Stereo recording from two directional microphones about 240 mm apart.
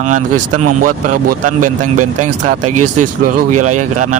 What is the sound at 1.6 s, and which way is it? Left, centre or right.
Speech, right.